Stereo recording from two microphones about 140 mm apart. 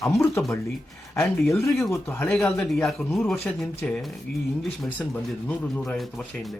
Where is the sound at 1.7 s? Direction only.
Centre (ahead or behind).